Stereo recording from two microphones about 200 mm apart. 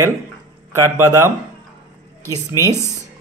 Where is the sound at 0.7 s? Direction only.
15° right (ahead or behind).